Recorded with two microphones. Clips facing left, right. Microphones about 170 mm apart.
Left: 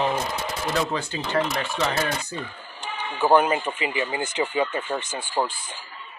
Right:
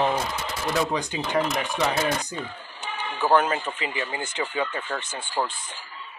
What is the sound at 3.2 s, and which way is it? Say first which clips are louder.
Speech: left 3 dB; 15° left (ahead or behind).